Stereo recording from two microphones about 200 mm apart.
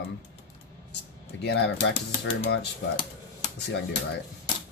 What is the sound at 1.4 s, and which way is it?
Speech, 60° left (ahead or behind).